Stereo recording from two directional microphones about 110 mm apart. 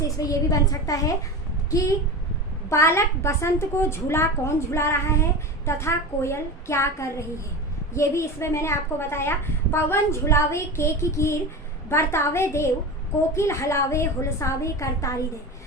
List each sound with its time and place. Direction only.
0.2 s a woman's voice: 35° left (ahead or behind)